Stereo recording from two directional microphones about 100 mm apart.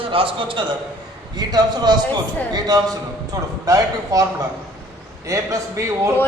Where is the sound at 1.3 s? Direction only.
45° right (ahead or behind).